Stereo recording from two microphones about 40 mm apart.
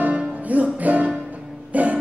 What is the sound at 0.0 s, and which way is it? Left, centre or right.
Music, right.